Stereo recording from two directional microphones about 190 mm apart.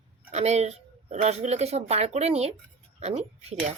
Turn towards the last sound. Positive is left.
turn(degrees=-35)  # may be behind; listen again after turning